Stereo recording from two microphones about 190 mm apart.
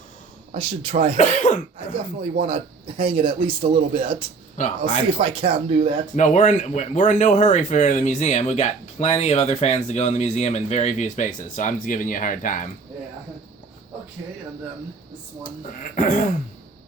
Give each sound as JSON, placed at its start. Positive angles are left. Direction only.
{"t": 0.5, "sound": "speech", "side_deg": -30}
{"t": 1.1, "sound": "speech", "side_deg": 35}
{"t": 2.4, "sound": "a man's voice", "side_deg": -30}
{"t": 4.6, "sound": "speech", "side_deg": 40}
{"t": 5.1, "sound": "a man's voice", "side_deg": -30}
{"t": 6.1, "sound": "speech", "side_deg": 40}
{"t": 15.8, "sound": "a sound", "side_deg": 45}